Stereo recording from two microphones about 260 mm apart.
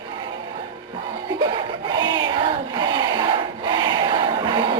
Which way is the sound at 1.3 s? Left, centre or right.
Centre.